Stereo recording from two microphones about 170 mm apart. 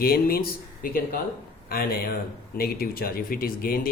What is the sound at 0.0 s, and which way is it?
Speech, 65° left (ahead or behind).